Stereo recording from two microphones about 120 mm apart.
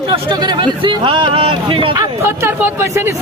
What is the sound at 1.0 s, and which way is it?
Vehicle, 45° right (ahead or behind).